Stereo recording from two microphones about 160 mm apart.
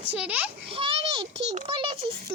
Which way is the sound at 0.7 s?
35° right (ahead or behind).